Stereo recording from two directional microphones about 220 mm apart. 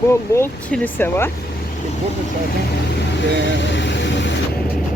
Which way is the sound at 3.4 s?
55° left (ahead or behind).